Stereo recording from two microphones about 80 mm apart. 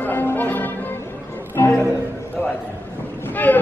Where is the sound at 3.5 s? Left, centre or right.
Left.